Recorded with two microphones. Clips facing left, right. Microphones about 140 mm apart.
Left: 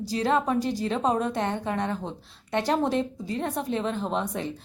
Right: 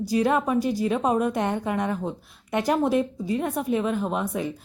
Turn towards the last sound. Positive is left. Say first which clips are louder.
# right 2 dB
turn(degrees=-10)  # may be behind; listen again after turning